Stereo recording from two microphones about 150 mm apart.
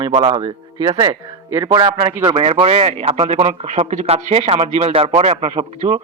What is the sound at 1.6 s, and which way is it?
Speech, 30° right (ahead or behind).